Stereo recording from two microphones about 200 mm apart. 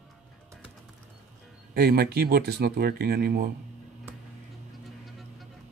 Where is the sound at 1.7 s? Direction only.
50° right (ahead or behind).